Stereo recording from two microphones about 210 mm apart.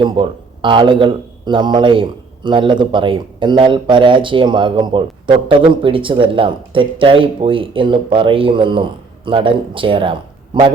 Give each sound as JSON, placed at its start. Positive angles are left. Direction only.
{"t": 0.0, "sound": "speech", "side_deg": -20}